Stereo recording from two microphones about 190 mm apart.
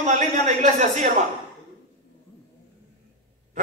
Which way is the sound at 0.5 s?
40° right (ahead or behind).